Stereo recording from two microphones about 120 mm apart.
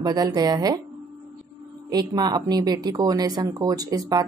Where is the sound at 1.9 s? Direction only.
35° right (ahead or behind).